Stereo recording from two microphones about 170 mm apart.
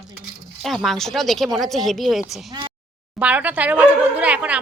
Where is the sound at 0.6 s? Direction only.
Centre (ahead or behind).